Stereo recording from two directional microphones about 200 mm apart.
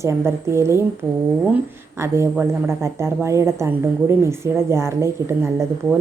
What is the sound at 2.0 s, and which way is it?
A woman's voice, 15° right (ahead or behind).